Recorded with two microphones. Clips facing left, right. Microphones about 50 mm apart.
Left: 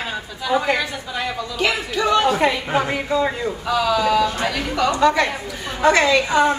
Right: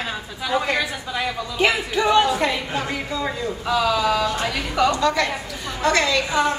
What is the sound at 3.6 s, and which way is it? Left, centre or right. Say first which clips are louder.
Speech: left 1 dB; centre.